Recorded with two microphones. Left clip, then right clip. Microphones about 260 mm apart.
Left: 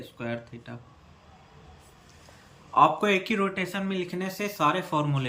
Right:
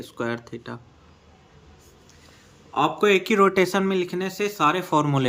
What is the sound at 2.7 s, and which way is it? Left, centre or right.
Speech, centre.